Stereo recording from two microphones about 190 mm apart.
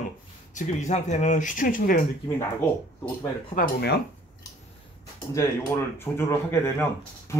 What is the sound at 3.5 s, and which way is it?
Speech, 55° left (ahead or behind).